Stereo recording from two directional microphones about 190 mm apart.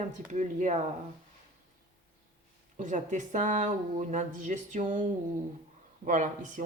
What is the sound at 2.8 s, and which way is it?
Speech, 40° right (ahead or behind).